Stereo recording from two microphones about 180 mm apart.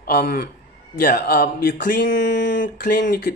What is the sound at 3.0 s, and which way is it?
Speech, 60° left (ahead or behind).